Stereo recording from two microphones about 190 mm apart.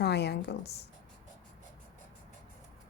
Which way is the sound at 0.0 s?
60° left (ahead or behind).